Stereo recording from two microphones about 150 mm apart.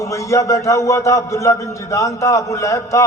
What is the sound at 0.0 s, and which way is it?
A man's voice, 20° left (ahead or behind).